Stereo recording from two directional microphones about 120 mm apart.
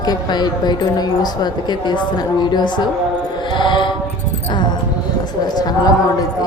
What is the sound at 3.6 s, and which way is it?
Music, 40° left (ahead or behind).